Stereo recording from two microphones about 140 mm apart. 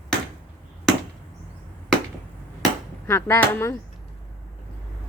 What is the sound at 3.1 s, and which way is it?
Speech, 15° left (ahead or behind).